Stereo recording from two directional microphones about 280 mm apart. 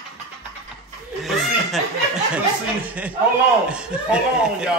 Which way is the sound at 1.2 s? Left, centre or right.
Centre.